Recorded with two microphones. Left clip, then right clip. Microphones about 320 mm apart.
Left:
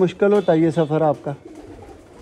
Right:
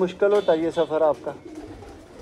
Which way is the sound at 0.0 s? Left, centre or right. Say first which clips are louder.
Left 3 dB; left.